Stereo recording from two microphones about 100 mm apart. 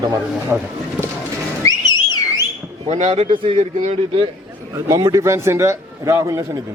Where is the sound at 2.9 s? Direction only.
90° right.